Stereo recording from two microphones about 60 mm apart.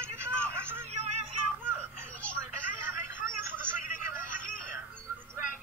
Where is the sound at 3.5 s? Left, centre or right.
Right.